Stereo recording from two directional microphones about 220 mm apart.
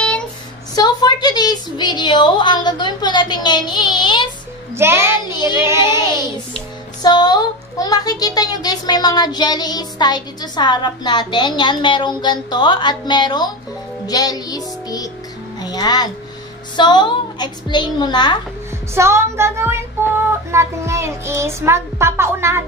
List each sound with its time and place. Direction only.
0.7 s a woman's voice: 20° left (ahead or behind)
4.7 s child singing: 10° right (ahead or behind)
7.0 s speech: 20° left (ahead or behind)
14.0 s music: 15° left (ahead or behind)
15.6 s a child's voice: 20° left (ahead or behind)
18.9 s child singing: 10° right (ahead or behind)